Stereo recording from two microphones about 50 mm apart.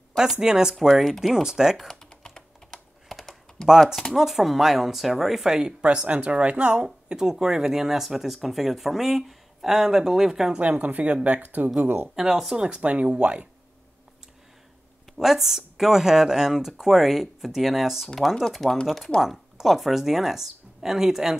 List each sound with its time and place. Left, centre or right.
0.4 s speech: centre
1.8 s speech: centre
2.0 s typing: centre
3.1 s typing: centre
4.1 s speech: centre
10.6 s speech: right
12.2 s speech: centre
12.6 s speech: right
15.1 s speech: centre
18.1 s speech: centre